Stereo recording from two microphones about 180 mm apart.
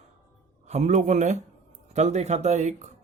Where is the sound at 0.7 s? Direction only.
40° right (ahead or behind).